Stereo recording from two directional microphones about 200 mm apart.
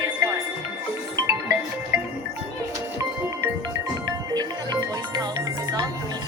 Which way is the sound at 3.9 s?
20° right (ahead or behind).